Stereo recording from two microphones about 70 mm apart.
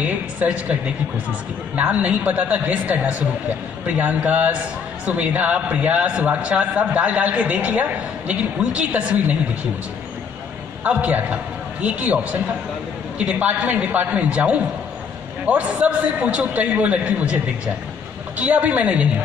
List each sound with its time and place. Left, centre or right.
0.0 s speech: right
1.8 s a man's voice: right
10.8 s a man's voice: centre
18.4 s a man's voice: centre